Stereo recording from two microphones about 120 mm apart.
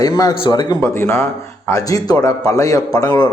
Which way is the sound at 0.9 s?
25° left (ahead or behind).